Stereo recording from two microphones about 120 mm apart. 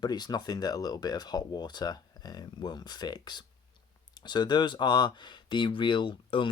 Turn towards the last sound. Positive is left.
turn(degrees=45)  # may be behind; listen again after turning